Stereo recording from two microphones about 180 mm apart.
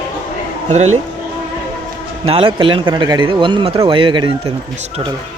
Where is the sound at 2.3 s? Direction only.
30° right (ahead or behind).